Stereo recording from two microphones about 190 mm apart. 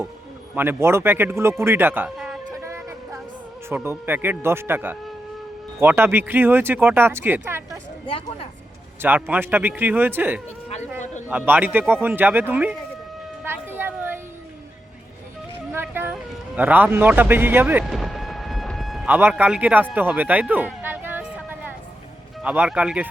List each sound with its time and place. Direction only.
0.5 s speech: 10° right (ahead or behind)
2.5 s music: 15° right (ahead or behind)
3.7 s speech: 10° right (ahead or behind)
8.0 s speech: 30° left (ahead or behind)
9.0 s speech: 10° right (ahead or behind)
13.4 s music: 10° right (ahead or behind)
15.7 s music: 10° right (ahead or behind)
22.4 s speech: 5° right (ahead or behind)